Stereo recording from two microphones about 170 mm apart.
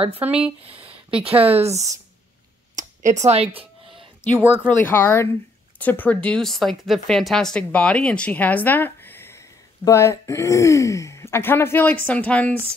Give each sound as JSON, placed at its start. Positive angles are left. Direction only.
{"t": 0.2, "sound": "speech", "side_deg": -5}
{"t": 0.7, "sound": "speech", "side_deg": -35}
{"t": 2.7, "sound": "a sound", "side_deg": -45}
{"t": 3.3, "sound": "speech", "side_deg": -40}
{"t": 4.7, "sound": "speech", "side_deg": 15}